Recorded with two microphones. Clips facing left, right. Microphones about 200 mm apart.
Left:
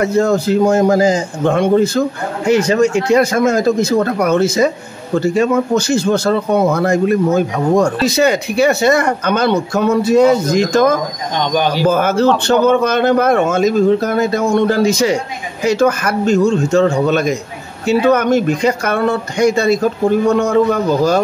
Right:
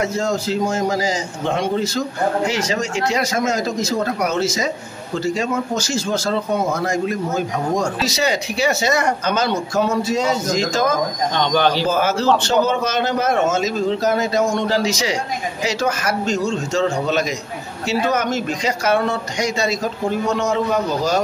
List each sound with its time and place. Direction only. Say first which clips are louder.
0.0 s a man's voice: left 7 dB; 60° left (ahead or behind)
11.3 s speech: left 2 dB; 15° left (ahead or behind)
11.8 s a man's voice: left 6 dB; 55° left (ahead or behind)